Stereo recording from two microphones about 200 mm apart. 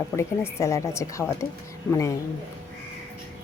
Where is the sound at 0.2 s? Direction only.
15° left (ahead or behind).